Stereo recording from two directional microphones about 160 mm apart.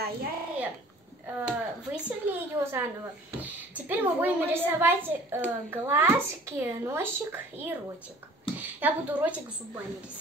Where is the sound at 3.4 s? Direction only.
10° right (ahead or behind).